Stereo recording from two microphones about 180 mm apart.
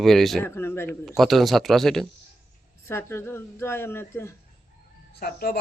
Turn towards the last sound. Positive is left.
turn(degrees=60)  # may be behind; listen again after turning